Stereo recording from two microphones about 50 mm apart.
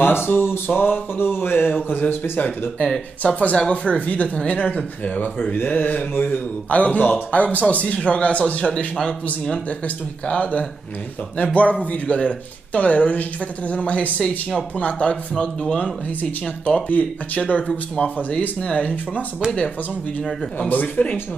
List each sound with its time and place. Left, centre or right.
0.0 s a sound: left
3.2 s speech: left
6.3 s speech: left
8.9 s speech: centre
9.7 s speech: left
15.8 s speech: left
20.5 s speech: left